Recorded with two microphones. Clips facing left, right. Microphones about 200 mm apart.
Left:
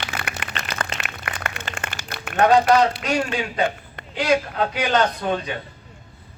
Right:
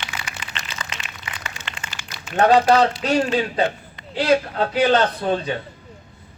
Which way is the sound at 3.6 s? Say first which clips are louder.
Even; 55° left (ahead or behind).